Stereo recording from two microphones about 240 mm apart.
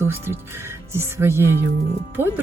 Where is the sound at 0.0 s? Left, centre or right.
Centre.